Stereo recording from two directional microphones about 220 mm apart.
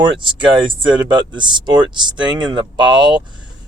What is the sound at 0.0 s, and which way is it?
Speech, 20° right (ahead or behind).